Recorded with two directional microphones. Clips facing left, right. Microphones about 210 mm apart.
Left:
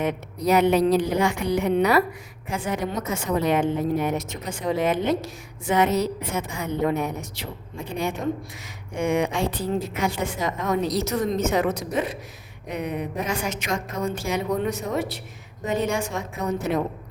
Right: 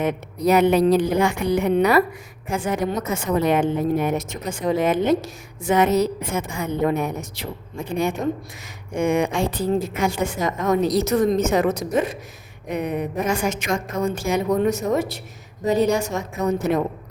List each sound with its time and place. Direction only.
0.0 s a woman's voice: 50° right (ahead or behind)